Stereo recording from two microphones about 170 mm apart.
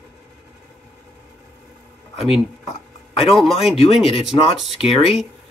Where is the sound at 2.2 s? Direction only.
5° right (ahead or behind).